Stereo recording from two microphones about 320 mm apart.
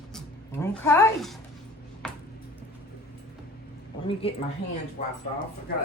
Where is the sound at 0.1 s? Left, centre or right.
Centre.